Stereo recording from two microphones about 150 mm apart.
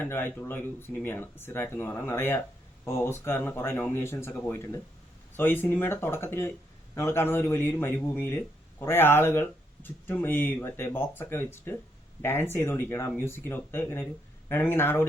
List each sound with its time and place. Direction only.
0.0 s speech: 15° left (ahead or behind)
5.4 s speech: 15° left (ahead or behind)